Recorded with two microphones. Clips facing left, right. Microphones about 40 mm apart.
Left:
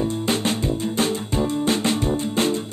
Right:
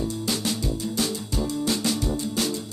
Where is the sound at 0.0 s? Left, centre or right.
Left.